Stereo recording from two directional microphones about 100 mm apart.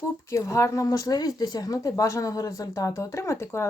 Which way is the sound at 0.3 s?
30° left (ahead or behind).